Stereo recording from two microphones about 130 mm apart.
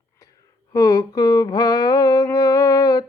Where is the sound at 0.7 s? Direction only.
25° left (ahead or behind).